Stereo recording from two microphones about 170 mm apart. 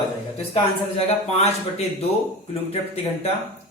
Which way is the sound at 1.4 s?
35° left (ahead or behind).